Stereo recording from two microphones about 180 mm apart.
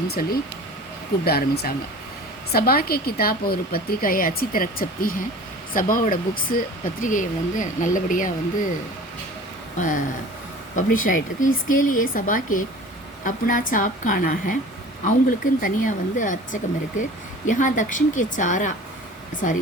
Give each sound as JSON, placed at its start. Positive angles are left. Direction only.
{"t": 0.1, "sound": "a woman's voice", "side_deg": 55}
{"t": 9.7, "sound": "speech", "side_deg": 45}